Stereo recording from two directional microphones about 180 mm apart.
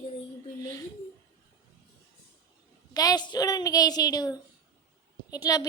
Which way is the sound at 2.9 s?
20° left (ahead or behind).